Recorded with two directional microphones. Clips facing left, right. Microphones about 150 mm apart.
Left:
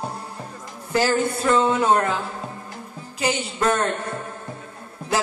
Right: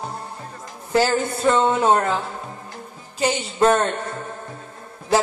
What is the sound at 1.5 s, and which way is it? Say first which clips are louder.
Speech: right 2 dB; 30° right (ahead or behind).